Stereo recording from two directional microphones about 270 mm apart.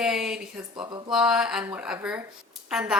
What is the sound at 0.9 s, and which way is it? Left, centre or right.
Speech, centre.